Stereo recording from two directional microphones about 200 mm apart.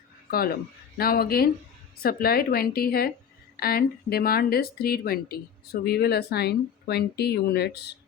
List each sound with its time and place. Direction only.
0.3 s speech: 50° left (ahead or behind)